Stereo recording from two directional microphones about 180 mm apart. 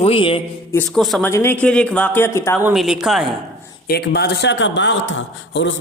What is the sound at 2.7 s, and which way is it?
Speech, 5° right (ahead or behind).